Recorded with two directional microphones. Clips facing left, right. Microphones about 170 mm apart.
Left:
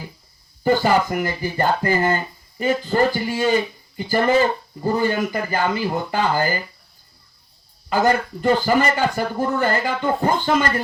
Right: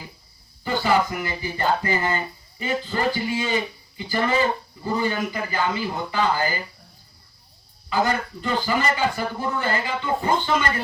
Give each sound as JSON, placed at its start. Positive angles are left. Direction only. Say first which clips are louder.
{"t": 0.6, "sound": "speech", "louder": "left 4 dB", "side_deg": 45}
{"t": 7.9, "sound": "speech", "louder": "left 5 dB", "side_deg": 50}